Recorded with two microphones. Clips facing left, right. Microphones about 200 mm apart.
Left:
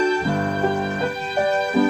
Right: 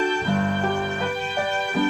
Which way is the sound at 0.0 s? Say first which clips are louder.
Left 3 dB; 40° left (ahead or behind).